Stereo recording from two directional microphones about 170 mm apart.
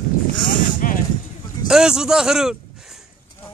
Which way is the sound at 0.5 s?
50° left (ahead or behind).